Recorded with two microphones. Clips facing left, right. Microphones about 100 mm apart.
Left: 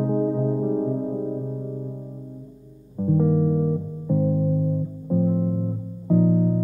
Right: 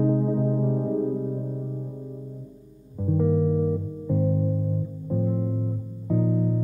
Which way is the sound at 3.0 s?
15° left (ahead or behind).